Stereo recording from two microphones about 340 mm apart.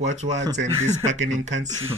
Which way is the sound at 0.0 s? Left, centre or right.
Centre.